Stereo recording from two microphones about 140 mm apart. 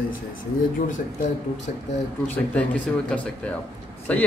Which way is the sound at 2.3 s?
10° left (ahead or behind).